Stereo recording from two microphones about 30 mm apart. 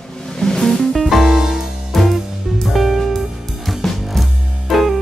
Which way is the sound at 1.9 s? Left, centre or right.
Centre.